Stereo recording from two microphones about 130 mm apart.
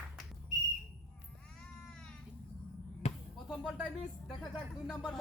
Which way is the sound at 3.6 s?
5° right (ahead or behind).